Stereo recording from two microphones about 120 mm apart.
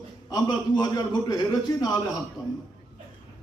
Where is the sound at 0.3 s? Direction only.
35° left (ahead or behind).